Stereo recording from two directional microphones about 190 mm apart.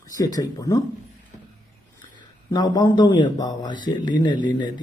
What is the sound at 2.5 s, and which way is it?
Speech, 20° left (ahead or behind).